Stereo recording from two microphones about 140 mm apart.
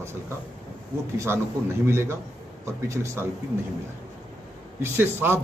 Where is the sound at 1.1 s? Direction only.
20° right (ahead or behind).